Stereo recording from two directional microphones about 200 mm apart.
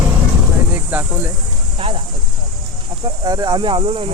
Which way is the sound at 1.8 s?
30° right (ahead or behind).